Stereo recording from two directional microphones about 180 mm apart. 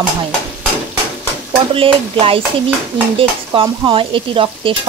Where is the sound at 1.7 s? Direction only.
30° right (ahead or behind).